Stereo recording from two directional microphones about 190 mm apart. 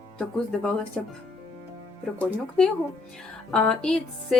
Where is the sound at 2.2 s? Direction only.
5° left (ahead or behind).